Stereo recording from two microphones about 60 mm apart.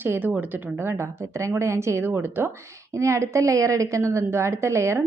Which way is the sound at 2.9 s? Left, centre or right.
Right.